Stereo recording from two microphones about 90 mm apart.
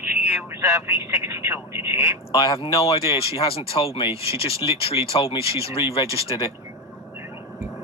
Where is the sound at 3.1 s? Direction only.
90° left.